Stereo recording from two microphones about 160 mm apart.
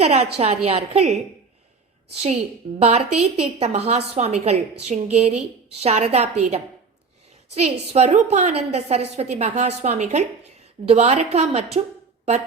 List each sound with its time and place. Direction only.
0.0 s a woman's voice: 40° right (ahead or behind)
2.7 s a woman's voice: 40° right (ahead or behind)